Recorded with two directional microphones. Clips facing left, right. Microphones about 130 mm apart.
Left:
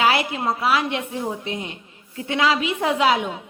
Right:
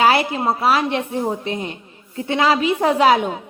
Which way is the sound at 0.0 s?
35° right (ahead or behind).